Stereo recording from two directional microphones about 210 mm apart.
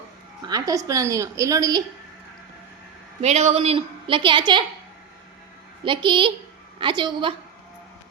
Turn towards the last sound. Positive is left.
turn(degrees=-20)  # may be behind; listen again after turning